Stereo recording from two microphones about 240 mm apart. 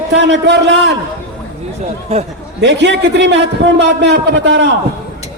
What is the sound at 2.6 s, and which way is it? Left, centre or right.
A man's voice, right.